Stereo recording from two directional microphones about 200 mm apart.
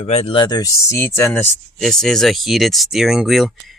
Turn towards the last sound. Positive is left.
turn(degrees=0)  # may be behind; listen again after turning